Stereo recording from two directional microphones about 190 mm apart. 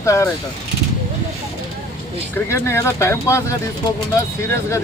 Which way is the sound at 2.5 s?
15° left (ahead or behind).